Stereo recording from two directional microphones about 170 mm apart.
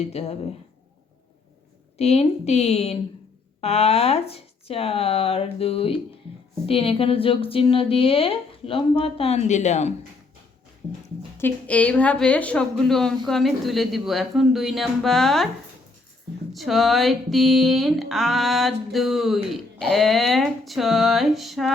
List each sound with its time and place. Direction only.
0.0 s a woman's voice: 40° left (ahead or behind)
2.0 s a woman's voice: 40° left (ahead or behind)
11.3 s speech: 10° left (ahead or behind)
16.5 s speech: centre (ahead or behind)